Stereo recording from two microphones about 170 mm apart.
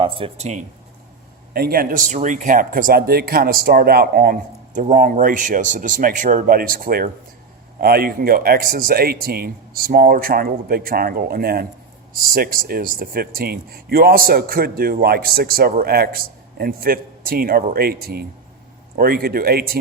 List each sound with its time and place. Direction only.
0.0 s speech: 35° right (ahead or behind)
1.5 s speech: 60° right (ahead or behind)